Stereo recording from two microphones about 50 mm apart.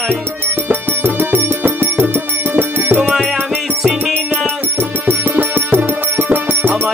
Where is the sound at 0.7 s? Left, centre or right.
Right.